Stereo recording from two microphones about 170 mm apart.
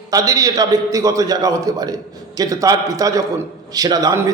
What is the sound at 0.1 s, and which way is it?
A man's voice, 20° right (ahead or behind).